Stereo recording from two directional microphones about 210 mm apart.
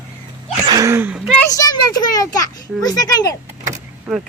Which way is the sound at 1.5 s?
15° left (ahead or behind).